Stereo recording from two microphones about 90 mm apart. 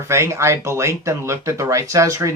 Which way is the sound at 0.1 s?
30° right (ahead or behind).